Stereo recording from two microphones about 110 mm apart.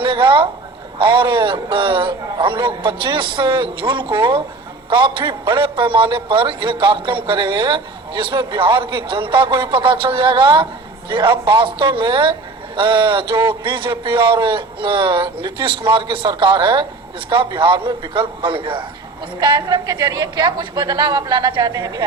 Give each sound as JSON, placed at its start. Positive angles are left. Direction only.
{"t": 0.0, "sound": "a man's voice", "side_deg": -45}
{"t": 19.4, "sound": "a woman's voice", "side_deg": -40}